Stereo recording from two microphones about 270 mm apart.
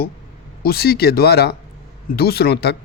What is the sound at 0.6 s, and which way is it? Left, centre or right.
A man's voice, left.